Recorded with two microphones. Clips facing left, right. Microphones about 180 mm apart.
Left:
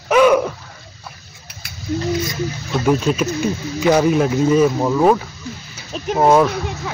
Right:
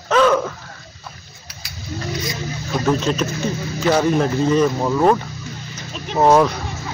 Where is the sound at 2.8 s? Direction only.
10° left (ahead or behind).